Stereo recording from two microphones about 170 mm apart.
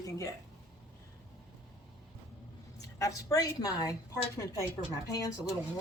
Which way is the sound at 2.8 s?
20° left (ahead or behind).